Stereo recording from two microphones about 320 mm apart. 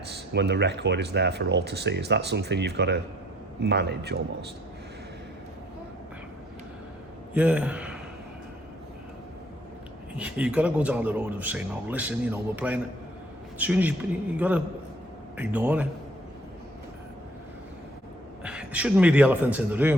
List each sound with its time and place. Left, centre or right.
0.3 s speech: right
7.3 s a man's voice: centre
10.2 s a man's voice: centre
18.4 s a man's voice: centre